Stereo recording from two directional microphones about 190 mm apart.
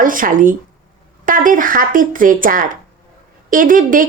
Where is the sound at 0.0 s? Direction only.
45° right (ahead or behind).